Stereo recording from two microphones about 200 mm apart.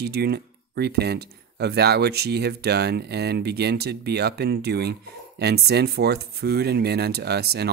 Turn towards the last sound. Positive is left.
turn(degrees=-55)  # may be behind; listen again after turning